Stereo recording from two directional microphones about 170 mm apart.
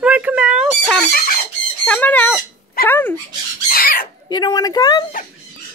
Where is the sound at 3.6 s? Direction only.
55° left (ahead or behind).